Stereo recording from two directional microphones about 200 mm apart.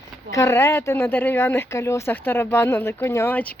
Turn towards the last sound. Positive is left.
turn(degrees=10)  # may be behind; listen again after turning